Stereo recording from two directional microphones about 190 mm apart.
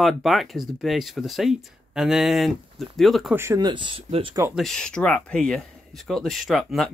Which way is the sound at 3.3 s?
15° right (ahead or behind).